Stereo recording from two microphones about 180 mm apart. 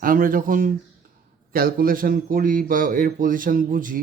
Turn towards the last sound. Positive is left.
turn(degrees=-50)  # may be behind; listen again after turning